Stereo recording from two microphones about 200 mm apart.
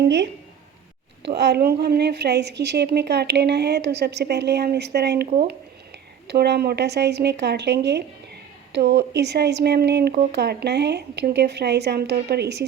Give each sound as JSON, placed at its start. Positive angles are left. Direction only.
{"t": 0.0, "sound": "speech", "side_deg": -60}
{"t": 1.4, "sound": "speech", "side_deg": -55}